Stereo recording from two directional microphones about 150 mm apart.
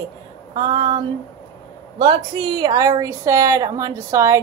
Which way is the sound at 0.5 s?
35° right (ahead or behind).